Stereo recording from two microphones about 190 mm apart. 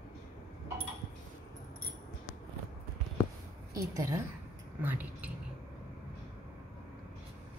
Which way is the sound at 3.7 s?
15° right (ahead or behind).